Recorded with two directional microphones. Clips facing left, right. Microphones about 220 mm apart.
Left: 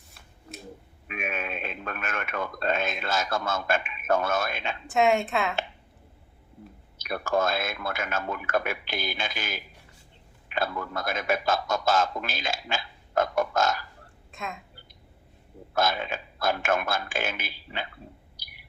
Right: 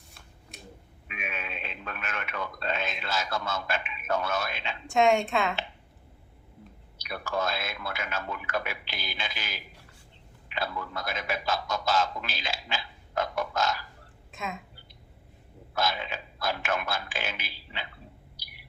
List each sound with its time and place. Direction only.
1.0 s speech: 50° left (ahead or behind)
4.9 s a woman's voice: centre (ahead or behind)
7.0 s a man's voice: 50° left (ahead or behind)
14.3 s a woman's voice: centre (ahead or behind)
15.7 s a man's voice: 50° left (ahead or behind)